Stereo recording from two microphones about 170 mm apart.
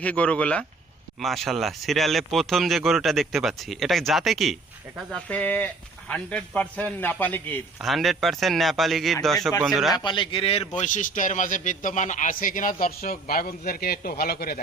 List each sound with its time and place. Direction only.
0.0 s speech: 10° left (ahead or behind)
7.8 s speech: centre (ahead or behind)
9.9 s a man's voice: 25° left (ahead or behind)
10.8 s a man's voice: 50° left (ahead or behind)